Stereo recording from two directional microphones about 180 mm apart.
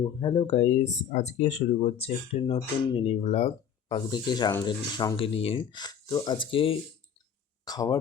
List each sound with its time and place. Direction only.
0.0 s speech: 25° left (ahead or behind)